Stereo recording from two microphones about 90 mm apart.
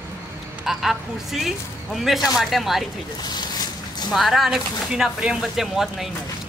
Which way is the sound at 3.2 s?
50° left (ahead or behind).